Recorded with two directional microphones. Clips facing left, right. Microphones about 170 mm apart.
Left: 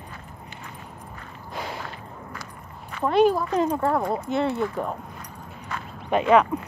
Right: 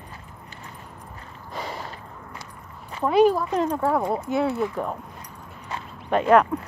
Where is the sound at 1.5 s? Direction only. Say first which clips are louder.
Even; centre (ahead or behind).